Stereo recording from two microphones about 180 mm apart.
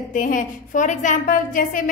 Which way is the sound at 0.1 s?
45° left (ahead or behind).